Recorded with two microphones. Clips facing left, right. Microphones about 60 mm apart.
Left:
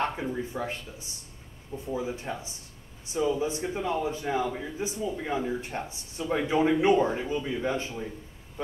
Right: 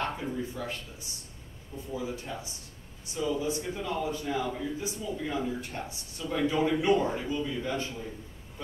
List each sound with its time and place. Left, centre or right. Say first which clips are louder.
0.0 s a man's voice: left 3 dB; left